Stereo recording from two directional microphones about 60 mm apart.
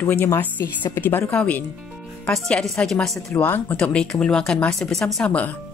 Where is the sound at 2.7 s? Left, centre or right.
Centre.